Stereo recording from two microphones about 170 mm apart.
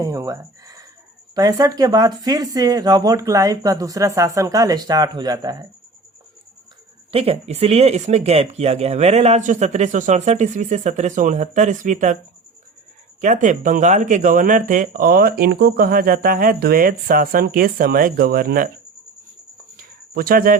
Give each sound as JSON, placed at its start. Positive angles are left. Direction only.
{"t": 0.0, "sound": "speech", "side_deg": -20}
{"t": 7.1, "sound": "speech", "side_deg": -35}
{"t": 13.2, "sound": "speech", "side_deg": -45}
{"t": 19.7, "sound": "a sound", "side_deg": -60}